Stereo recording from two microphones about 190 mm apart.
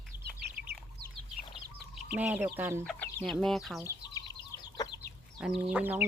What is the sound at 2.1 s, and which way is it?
Speech, 10° right (ahead or behind).